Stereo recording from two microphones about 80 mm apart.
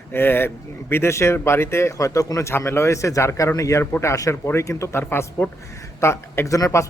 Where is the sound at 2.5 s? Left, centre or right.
Left.